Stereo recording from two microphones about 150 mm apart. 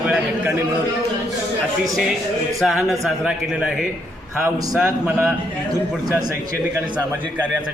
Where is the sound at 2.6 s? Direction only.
Centre (ahead or behind).